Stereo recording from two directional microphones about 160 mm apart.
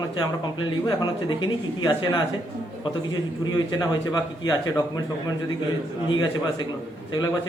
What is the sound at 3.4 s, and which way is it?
Speech, 25° left (ahead or behind).